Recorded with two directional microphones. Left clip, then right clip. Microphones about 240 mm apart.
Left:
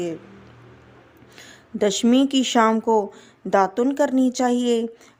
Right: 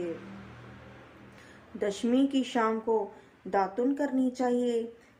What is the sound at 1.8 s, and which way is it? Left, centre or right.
Speech, left.